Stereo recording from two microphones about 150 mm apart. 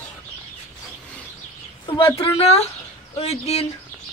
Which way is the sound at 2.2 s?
40° left (ahead or behind).